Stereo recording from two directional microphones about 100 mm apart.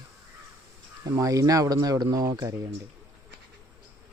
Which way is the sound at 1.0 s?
35° right (ahead or behind).